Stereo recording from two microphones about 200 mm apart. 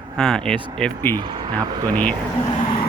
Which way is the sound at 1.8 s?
10° left (ahead or behind).